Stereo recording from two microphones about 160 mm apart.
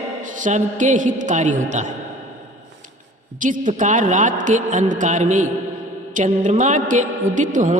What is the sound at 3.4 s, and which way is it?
A man's voice, 55° right (ahead or behind).